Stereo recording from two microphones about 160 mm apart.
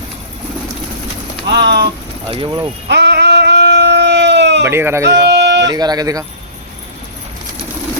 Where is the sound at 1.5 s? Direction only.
90° right.